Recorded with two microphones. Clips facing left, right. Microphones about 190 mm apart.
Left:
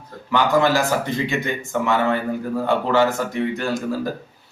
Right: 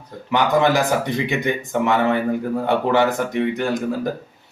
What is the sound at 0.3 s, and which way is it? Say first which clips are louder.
A man's voice: right 1 dB; 20° right (ahead or behind).